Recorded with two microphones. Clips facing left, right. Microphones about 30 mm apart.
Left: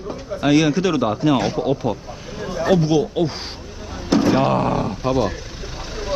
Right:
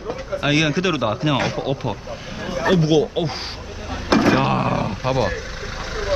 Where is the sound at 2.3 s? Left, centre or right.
Right.